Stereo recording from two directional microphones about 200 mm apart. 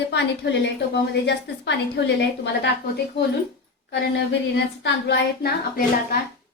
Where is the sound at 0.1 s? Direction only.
60° left (ahead or behind).